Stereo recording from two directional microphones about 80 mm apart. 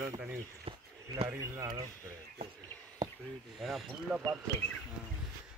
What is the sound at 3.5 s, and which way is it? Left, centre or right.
Speech, centre.